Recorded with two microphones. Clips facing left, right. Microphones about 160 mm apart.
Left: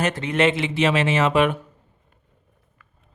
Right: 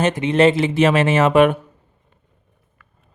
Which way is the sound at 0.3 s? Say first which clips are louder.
Right 6 dB; 40° right (ahead or behind).